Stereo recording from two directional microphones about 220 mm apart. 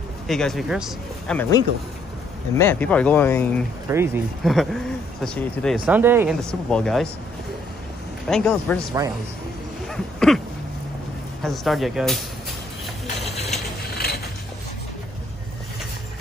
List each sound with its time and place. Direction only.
0.3 s speech: centre (ahead or behind)
2.5 s speech: 10° left (ahead or behind)
3.8 s speech: 10° right (ahead or behind)
4.4 s speech: centre (ahead or behind)
5.9 s speech: 10° right (ahead or behind)
6.4 s speech: 5° left (ahead or behind)
8.3 s speech: 5° left (ahead or behind)
9.8 s a sound: centre (ahead or behind)
11.4 s speech: centre (ahead or behind)
13.0 s a sound: 30° left (ahead or behind)
13.9 s a sound: 45° left (ahead or behind)